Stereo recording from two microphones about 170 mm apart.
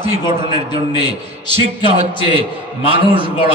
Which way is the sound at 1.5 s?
35° right (ahead or behind).